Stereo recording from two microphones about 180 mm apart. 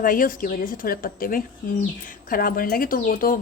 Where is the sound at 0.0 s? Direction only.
50° left (ahead or behind).